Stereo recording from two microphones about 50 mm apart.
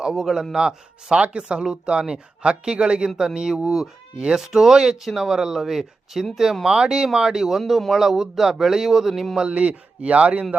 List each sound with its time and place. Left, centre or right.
0.0 s speech: centre
9.3 s speech: centre